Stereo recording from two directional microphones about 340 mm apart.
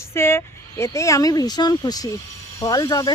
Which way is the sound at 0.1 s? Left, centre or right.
Centre.